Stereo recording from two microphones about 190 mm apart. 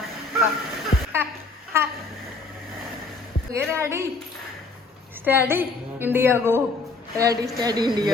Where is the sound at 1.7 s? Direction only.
15° right (ahead or behind).